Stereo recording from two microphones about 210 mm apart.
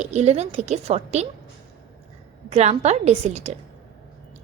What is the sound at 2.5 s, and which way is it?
A woman's voice, 30° right (ahead or behind).